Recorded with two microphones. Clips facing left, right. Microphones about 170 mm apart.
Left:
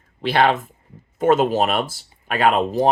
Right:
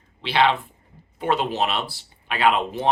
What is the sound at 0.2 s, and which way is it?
Speech, 45° left (ahead or behind).